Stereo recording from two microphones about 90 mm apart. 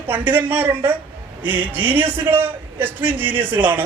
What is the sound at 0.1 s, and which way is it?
A man's voice, 20° right (ahead or behind).